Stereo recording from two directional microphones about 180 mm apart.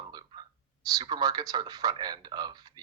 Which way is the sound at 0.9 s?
20° right (ahead or behind).